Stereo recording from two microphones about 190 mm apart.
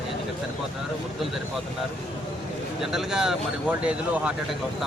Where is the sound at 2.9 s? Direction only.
5° right (ahead or behind).